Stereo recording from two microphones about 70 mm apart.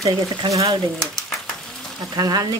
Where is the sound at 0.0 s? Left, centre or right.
Right.